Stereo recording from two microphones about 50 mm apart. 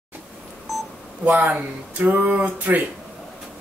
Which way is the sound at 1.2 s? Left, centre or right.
Right.